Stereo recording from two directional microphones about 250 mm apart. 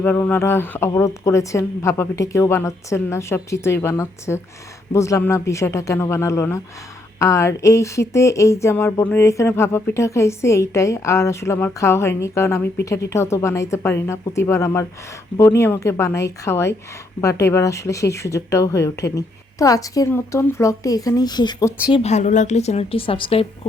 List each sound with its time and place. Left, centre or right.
0.0 s speech: centre
21.9 s a woman's voice: left